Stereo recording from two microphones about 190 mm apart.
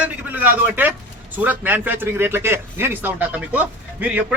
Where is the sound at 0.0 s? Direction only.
10° right (ahead or behind).